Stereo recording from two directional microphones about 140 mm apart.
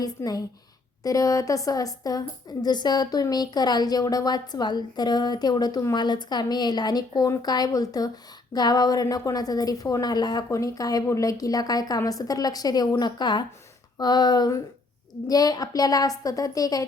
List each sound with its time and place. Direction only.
0.0 s speech: 25° left (ahead or behind)